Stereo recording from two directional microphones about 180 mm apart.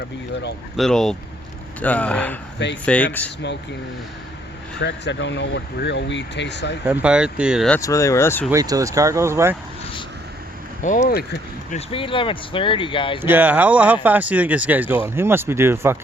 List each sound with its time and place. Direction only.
0.8 s speech: centre (ahead or behind)
3.2 s speech: 75° left (ahead or behind)
4.8 s speech: 75° left (ahead or behind)
6.8 s speech: 10° right (ahead or behind)
7.8 s speech: 20° left (ahead or behind)
8.4 s speech: 20° right (ahead or behind)
10.8 s speech: 45° left (ahead or behind)
11.7 s speech: 30° left (ahead or behind)
13.2 s speech: 10° right (ahead or behind)